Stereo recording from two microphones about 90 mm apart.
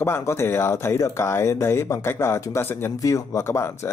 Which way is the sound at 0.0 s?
30° left (ahead or behind).